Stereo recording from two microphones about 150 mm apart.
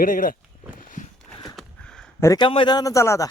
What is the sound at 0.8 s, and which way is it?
Walk, 60° left (ahead or behind).